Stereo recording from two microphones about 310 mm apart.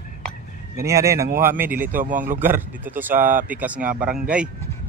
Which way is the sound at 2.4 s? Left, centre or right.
Centre.